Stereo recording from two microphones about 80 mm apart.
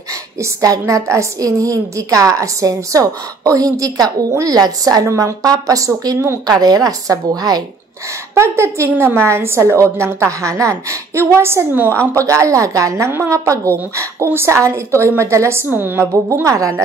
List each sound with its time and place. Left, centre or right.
0.4 s a woman's voice: right
5.0 s a woman's voice: right
6.4 s a woman's voice: right
8.4 s a woman's voice: right
16.4 s a woman's voice: right